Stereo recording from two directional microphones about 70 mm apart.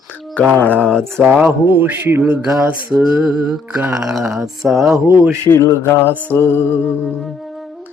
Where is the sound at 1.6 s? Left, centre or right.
Right.